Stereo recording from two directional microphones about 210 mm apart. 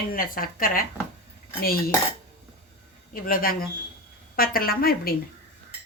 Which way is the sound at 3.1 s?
40° left (ahead or behind).